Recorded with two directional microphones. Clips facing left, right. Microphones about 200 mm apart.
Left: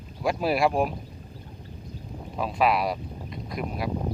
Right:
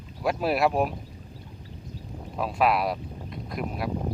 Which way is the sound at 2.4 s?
Centre (ahead or behind).